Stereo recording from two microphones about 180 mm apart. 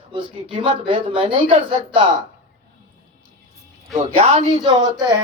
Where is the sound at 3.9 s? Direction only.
35° right (ahead or behind).